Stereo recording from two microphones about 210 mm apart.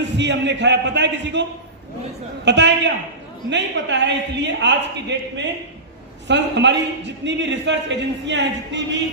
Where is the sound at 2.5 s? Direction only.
55° right (ahead or behind).